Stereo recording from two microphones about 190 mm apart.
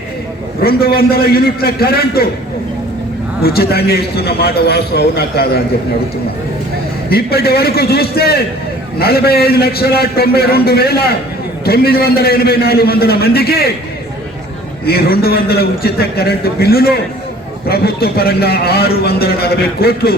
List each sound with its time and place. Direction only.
0.6 s a man's voice: 55° left (ahead or behind)
3.4 s a man's voice: 55° left (ahead or behind)
7.1 s a man's voice: 55° left (ahead or behind)
14.8 s a man's voice: 55° left (ahead or behind)